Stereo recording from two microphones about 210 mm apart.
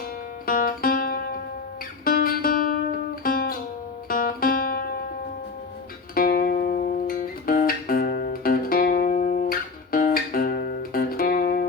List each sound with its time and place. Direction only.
0.4 s music: 45° left (ahead or behind)
6.1 s music: 45° left (ahead or behind)